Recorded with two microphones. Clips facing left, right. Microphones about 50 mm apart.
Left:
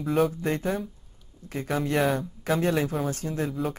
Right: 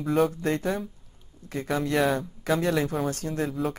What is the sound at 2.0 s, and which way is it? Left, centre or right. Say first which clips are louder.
Speech: right 1 dB; centre.